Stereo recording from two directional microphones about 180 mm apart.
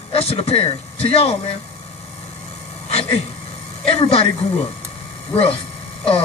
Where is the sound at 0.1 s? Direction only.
30° left (ahead or behind).